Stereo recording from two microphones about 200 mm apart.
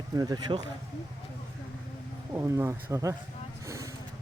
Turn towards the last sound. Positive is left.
turn(degrees=-15)  # may be behind; listen again after turning